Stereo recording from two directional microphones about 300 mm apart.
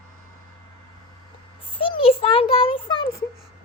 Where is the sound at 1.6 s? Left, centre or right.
Centre.